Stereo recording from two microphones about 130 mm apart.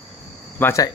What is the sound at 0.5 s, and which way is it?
Speech, 15° left (ahead or behind).